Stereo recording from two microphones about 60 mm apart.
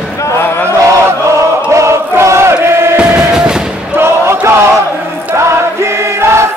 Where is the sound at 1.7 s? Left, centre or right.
Right.